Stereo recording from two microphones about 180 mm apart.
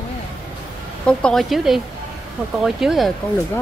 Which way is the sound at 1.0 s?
5° left (ahead or behind).